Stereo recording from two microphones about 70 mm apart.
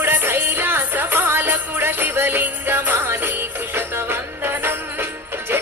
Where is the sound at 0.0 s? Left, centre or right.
Right.